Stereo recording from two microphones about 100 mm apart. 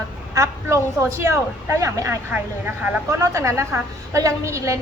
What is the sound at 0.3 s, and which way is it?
A woman's voice, 35° right (ahead or behind).